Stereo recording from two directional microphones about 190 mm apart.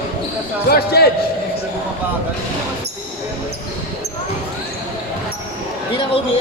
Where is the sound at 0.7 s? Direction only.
55° left (ahead or behind).